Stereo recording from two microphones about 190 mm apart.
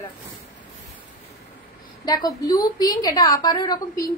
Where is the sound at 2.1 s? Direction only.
20° left (ahead or behind).